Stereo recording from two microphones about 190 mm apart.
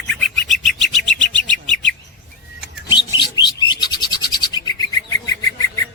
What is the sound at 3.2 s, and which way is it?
Bird, 25° left (ahead or behind).